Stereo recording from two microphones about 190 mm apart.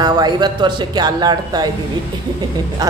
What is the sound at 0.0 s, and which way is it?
Speech, 20° right (ahead or behind).